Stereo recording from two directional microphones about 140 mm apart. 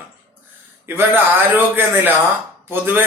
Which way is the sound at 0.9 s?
15° right (ahead or behind).